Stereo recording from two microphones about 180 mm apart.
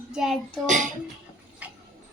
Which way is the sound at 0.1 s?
Centre (ahead or behind).